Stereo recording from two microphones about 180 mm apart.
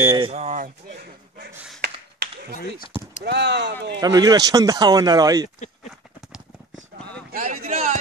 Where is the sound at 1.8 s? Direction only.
65° right (ahead or behind).